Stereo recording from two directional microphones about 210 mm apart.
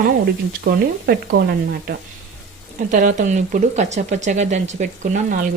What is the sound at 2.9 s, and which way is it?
Speech, 40° right (ahead or behind).